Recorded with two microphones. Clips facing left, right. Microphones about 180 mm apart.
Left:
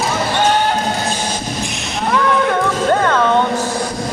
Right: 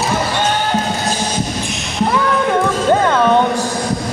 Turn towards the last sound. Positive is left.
turn(degrees=-15)  # may be behind; listen again after turning